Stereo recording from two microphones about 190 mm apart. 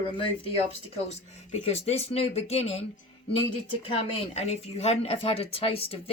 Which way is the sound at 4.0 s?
30° left (ahead or behind).